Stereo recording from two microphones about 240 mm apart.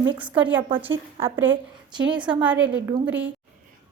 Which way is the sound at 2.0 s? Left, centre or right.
Centre.